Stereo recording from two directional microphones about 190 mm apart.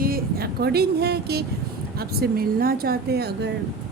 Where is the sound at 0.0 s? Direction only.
50° right (ahead or behind).